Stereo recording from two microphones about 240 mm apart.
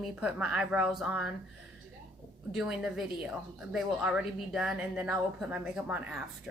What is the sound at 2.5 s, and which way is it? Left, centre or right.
Speech, centre.